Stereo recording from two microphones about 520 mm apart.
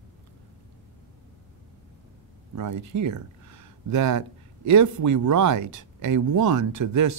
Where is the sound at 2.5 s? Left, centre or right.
Right.